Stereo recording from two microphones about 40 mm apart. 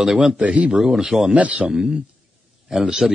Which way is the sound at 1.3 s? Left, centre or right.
Right.